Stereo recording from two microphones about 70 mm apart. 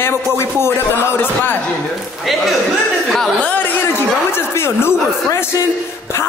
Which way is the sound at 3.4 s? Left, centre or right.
Left.